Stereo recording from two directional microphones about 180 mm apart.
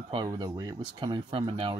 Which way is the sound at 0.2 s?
20° right (ahead or behind).